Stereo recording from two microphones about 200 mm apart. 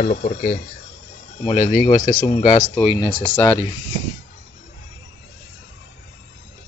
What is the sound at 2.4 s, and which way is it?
Speech, 40° left (ahead or behind).